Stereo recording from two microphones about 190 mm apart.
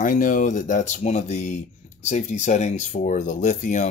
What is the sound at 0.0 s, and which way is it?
Speech, 45° left (ahead or behind).